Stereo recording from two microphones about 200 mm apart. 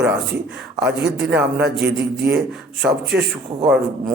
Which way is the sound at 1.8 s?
55° right (ahead or behind).